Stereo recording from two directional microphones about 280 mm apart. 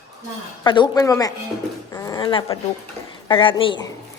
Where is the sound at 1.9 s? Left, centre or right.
Centre.